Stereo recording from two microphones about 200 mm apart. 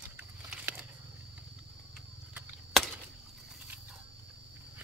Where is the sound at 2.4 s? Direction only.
5° right (ahead or behind).